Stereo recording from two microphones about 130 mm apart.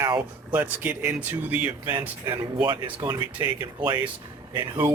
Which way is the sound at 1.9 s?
35° right (ahead or behind).